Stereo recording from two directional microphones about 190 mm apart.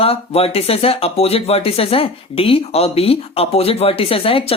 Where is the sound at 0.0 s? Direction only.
30° left (ahead or behind).